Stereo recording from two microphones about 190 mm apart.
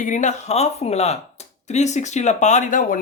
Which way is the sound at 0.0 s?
40° left (ahead or behind).